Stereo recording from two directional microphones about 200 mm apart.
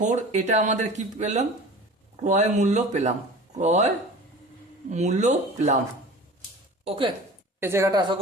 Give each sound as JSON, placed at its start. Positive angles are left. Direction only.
{"t": 0.0, "sound": "speech", "side_deg": -35}
{"t": 7.6, "sound": "a woman's voice", "side_deg": -15}